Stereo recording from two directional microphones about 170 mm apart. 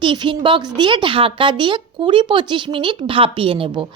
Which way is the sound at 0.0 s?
30° right (ahead or behind).